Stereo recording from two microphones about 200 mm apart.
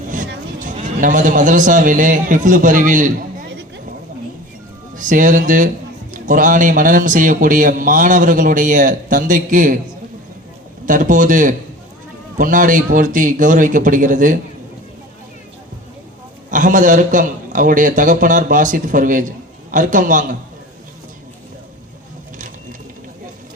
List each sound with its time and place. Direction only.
0.6 s speech: 40° right (ahead or behind)
4.9 s speech: 40° right (ahead or behind)
10.8 s speech: 40° right (ahead or behind)
16.5 s speech: 40° right (ahead or behind)